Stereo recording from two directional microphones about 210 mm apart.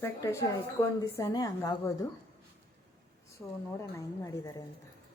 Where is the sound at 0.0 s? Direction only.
15° left (ahead or behind).